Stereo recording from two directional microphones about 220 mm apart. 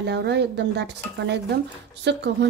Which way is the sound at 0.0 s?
50° right (ahead or behind).